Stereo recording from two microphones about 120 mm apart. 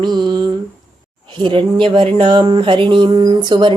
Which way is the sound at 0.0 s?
40° right (ahead or behind).